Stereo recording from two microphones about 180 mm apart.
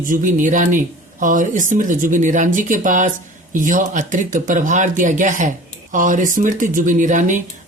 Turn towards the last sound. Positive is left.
turn(degrees=-45)  # may be behind; listen again after turning